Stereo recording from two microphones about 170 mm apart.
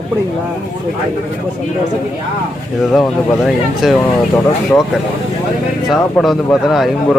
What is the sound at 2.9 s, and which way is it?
Speech, centre (ahead or behind).